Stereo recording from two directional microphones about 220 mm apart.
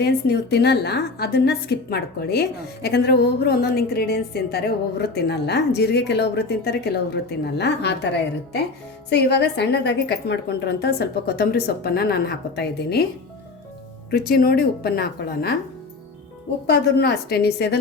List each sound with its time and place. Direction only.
0.0 s a woman's voice: 50° left (ahead or behind)
9.0 s a woman's voice: 50° left (ahead or behind)
14.1 s a woman's voice: 45° left (ahead or behind)
16.6 s a woman's voice: 45° left (ahead or behind)